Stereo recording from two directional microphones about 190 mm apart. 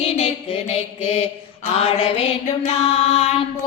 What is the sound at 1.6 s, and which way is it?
Mantra, 35° left (ahead or behind).